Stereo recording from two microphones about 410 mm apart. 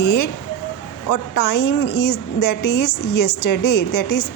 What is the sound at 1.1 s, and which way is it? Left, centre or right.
Speech, left.